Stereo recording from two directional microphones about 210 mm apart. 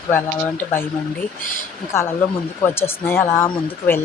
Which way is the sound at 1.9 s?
10° left (ahead or behind).